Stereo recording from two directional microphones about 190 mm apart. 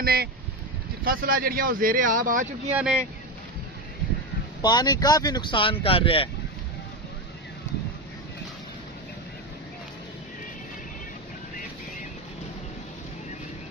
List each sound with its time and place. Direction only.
0.0 s speech: 55° right (ahead or behind)
2.7 s speech: 5° right (ahead or behind)
4.6 s speech: 20° left (ahead or behind)